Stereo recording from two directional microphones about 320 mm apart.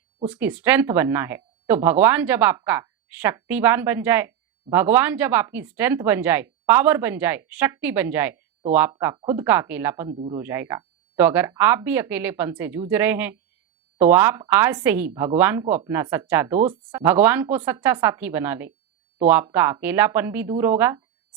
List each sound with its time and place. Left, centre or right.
0.3 s speech: centre
16.6 s speech: right
17.0 s speech: centre